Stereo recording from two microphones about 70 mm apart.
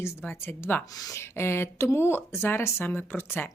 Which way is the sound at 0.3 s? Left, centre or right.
Left.